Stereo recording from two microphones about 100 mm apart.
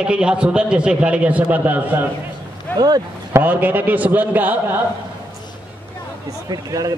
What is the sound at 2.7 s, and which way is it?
Speech, 15° left (ahead or behind).